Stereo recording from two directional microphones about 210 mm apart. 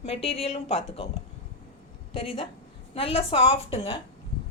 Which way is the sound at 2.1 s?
25° left (ahead or behind).